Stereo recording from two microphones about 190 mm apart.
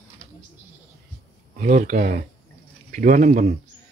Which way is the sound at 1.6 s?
40° right (ahead or behind).